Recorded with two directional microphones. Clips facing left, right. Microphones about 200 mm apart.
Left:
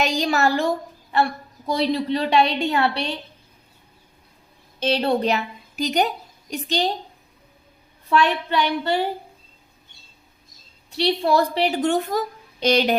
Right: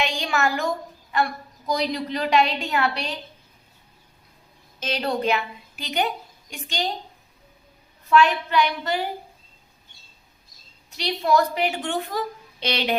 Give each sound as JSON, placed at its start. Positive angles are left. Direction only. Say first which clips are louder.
{"t": 0.0, "sound": "a woman's voice", "louder": "left 4 dB", "side_deg": 40}
{"t": 4.8, "sound": "a woman's voice", "louder": "left 5 dB", "side_deg": 30}
{"t": 8.1, "sound": "a woman's voice", "louder": "right 1 dB", "side_deg": 35}
{"t": 10.9, "sound": "a woman's voice", "louder": "left 2 dB", "side_deg": 30}